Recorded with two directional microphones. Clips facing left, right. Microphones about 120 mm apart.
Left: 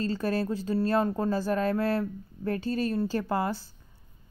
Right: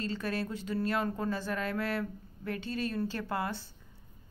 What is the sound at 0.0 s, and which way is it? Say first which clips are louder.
Speech: left 6 dB; 35° left (ahead or behind).